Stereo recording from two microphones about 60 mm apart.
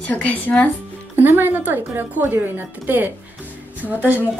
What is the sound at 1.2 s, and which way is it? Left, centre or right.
A woman's voice, right.